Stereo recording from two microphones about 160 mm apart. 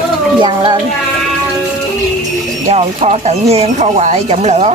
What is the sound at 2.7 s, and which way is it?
Speech, 40° right (ahead or behind).